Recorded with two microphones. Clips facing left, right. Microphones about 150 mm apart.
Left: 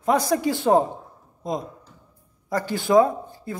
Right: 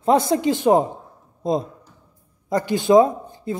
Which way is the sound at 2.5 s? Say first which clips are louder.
Right 3 dB; 20° right (ahead or behind).